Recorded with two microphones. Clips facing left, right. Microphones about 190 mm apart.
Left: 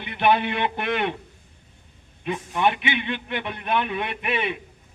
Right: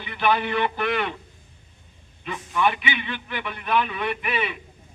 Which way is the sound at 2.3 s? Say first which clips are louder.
Left 1 dB; 20° left (ahead or behind).